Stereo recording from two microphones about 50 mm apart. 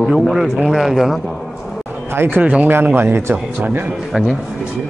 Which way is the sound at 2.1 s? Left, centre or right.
Right.